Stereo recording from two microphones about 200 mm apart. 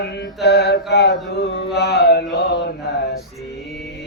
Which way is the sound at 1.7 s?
55° left (ahead or behind).